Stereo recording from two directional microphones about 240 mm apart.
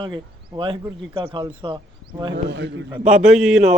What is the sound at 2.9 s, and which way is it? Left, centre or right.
Speech, centre.